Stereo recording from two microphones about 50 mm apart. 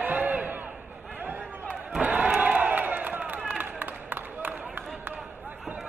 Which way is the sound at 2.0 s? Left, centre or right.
Right.